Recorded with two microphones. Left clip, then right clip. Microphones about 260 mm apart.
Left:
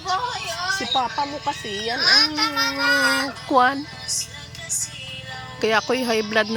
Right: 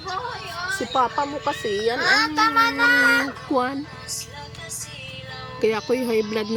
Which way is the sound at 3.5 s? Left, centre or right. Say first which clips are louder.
Left 7 dB; centre.